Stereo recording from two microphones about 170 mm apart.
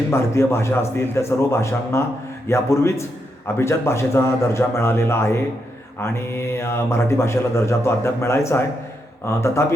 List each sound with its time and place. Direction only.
0.1 s a man's voice: 15° left (ahead or behind)